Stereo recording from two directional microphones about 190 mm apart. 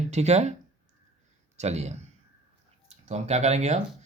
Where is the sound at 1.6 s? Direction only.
35° right (ahead or behind).